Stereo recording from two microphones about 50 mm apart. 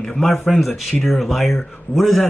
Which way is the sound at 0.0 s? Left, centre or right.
Centre.